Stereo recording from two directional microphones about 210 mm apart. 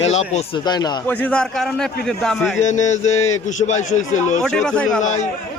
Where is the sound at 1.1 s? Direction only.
5° left (ahead or behind).